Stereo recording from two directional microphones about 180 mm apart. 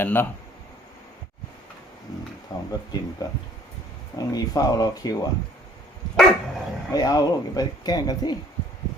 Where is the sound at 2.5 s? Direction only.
20° left (ahead or behind).